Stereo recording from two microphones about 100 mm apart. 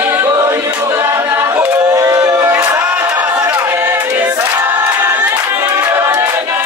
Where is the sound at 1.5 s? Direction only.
15° right (ahead or behind).